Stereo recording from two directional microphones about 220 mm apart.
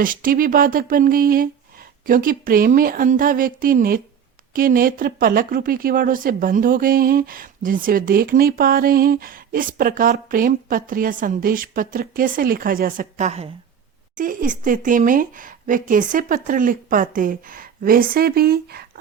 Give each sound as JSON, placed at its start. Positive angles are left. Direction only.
{"t": 0.0, "sound": "speech", "side_deg": -40}